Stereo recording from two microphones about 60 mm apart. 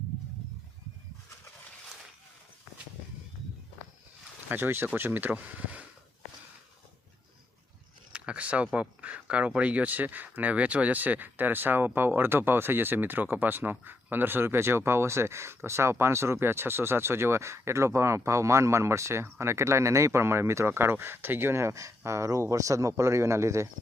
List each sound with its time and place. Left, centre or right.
4.4 s speech: right
8.1 s speech: centre; by 23.6 s right